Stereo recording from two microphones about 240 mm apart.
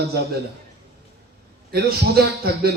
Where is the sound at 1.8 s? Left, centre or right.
Right.